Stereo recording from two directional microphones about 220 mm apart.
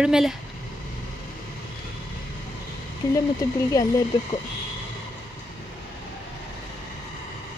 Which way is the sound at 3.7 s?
15° left (ahead or behind).